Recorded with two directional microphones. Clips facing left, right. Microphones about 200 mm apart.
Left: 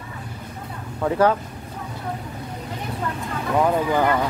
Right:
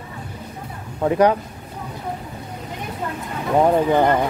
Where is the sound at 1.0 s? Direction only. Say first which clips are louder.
Right 3 dB; 15° right (ahead or behind).